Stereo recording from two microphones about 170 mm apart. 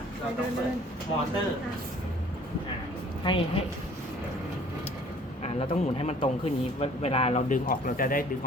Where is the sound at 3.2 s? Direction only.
30° left (ahead or behind).